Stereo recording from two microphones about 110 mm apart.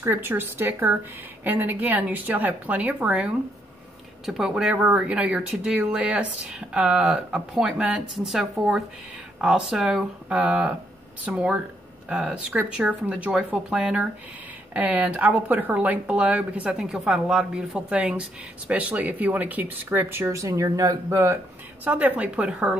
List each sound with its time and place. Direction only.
0.0 s speech: 20° right (ahead or behind)
21.8 s speech: 15° right (ahead or behind)